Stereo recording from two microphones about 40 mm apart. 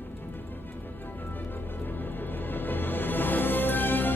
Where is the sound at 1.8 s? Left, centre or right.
Left.